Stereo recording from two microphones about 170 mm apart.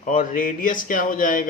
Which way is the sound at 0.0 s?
50° left (ahead or behind).